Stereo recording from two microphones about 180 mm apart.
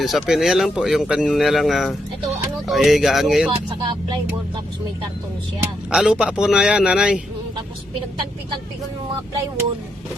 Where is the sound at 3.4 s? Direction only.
25° right (ahead or behind).